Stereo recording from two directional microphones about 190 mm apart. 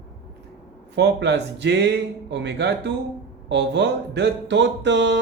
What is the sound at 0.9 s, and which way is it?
A man's voice, 65° right (ahead or behind).